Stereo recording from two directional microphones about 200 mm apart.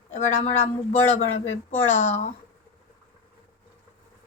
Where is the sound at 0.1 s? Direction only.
35° left (ahead or behind).